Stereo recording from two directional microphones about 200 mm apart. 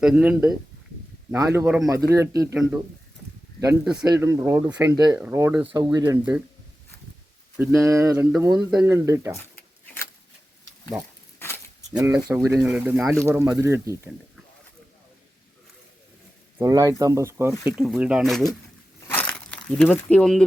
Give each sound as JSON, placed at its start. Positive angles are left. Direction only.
{"t": 0.0, "sound": "speech", "side_deg": -5}
{"t": 4.0, "sound": "speech", "side_deg": -15}
{"t": 5.6, "sound": "speech", "side_deg": -20}
{"t": 7.6, "sound": "speech", "side_deg": -15}
{"t": 10.9, "sound": "speech", "side_deg": -15}
{"t": 11.3, "sound": "a sound", "side_deg": 10}
{"t": 11.9, "sound": "speech", "side_deg": -15}
{"t": 16.6, "sound": "speech", "side_deg": -15}
{"t": 17.7, "sound": "speech", "side_deg": -5}
{"t": 19.0, "sound": "a sound", "side_deg": 10}